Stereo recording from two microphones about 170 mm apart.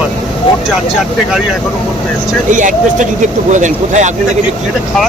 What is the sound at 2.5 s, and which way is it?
Speech, 50° right (ahead or behind).